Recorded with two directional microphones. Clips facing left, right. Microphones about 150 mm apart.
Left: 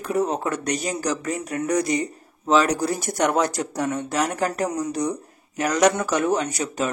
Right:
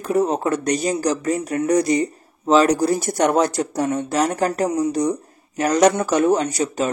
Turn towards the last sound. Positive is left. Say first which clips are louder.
# right 4 dB
turn(degrees=-30)  # may be behind; listen again after turning